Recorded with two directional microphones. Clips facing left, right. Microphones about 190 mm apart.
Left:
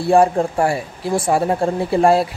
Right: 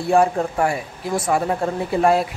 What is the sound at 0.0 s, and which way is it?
Speech, 30° left (ahead or behind).